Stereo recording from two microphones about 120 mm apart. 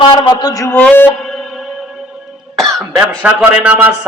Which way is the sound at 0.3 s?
35° left (ahead or behind).